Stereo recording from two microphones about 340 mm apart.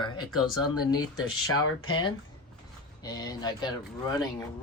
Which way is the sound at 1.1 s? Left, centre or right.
Left.